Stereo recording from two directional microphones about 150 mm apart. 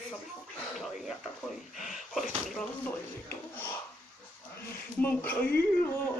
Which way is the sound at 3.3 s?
15° left (ahead or behind).